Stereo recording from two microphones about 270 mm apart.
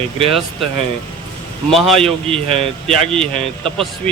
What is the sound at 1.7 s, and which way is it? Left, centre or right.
Speech, centre.